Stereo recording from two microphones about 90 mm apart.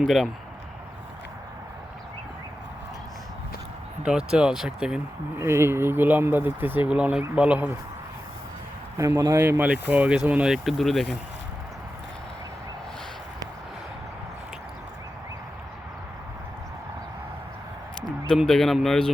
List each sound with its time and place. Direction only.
4.0 s speech: 10° right (ahead or behind)
5.4 s speech: 30° right (ahead or behind)
9.0 s speech: 40° right (ahead or behind)
9.4 s speech: 20° right (ahead or behind); by 11.2 s centre (ahead or behind)
18.4 s speech: 5° left (ahead or behind)